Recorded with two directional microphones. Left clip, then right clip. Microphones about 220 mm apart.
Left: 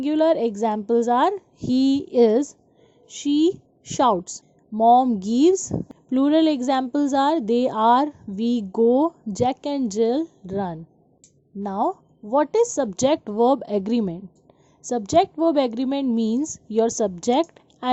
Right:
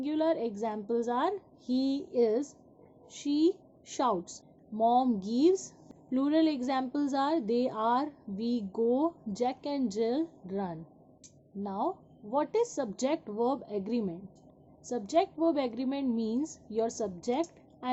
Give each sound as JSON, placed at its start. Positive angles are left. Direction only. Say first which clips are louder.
{"t": 0.0, "sound": "a woman's voice", "louder": "left 11 dB", "side_deg": 35}